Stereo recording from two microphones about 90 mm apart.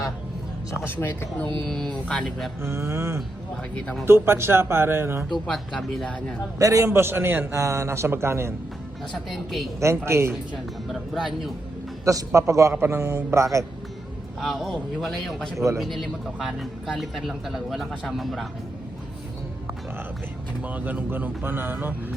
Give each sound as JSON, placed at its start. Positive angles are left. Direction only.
{"t": 0.9, "sound": "speech", "side_deg": 25}
{"t": 1.7, "sound": "speech", "side_deg": 5}
{"t": 2.6, "sound": "a man's voice", "side_deg": -30}
{"t": 3.8, "sound": "speech", "side_deg": 10}
{"t": 4.0, "sound": "a man's voice", "side_deg": -30}
{"t": 5.5, "sound": "speech", "side_deg": 10}
{"t": 6.6, "sound": "a man's voice", "side_deg": -35}
{"t": 9.1, "sound": "speech", "side_deg": 0}
{"t": 10.1, "sound": "a man's voice", "side_deg": -30}
{"t": 10.9, "sound": "speech", "side_deg": 0}
{"t": 12.0, "sound": "speech", "side_deg": -35}
{"t": 14.4, "sound": "speech", "side_deg": 0}
{"t": 20.7, "sound": "a man's voice", "side_deg": -20}